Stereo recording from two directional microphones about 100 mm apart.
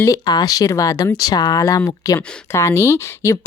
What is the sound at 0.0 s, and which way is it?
Speech, 35° left (ahead or behind).